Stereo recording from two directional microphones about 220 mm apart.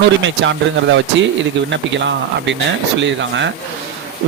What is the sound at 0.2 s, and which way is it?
A man's voice, 55° right (ahead or behind).